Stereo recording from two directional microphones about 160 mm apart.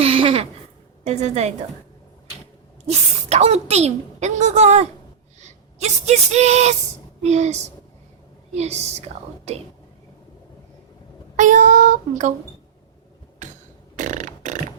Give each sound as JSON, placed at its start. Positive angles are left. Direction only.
{"t": 0.0, "sound": "a sound", "side_deg": -35}
{"t": 1.0, "sound": "a woman's voice", "side_deg": -45}
{"t": 3.2, "sound": "a woman's voice", "side_deg": -40}
{"t": 11.3, "sound": "a woman's voice", "side_deg": -50}
{"t": 13.9, "sound": "burping", "side_deg": -50}